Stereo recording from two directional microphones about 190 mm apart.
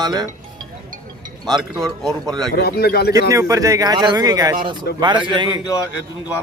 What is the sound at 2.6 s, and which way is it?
Speech, 55° left (ahead or behind).